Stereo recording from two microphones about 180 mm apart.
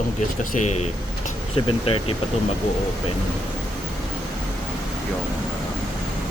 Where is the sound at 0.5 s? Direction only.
40° left (ahead or behind).